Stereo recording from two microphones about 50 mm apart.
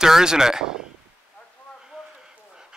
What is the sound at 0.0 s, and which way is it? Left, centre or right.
Speech, centre.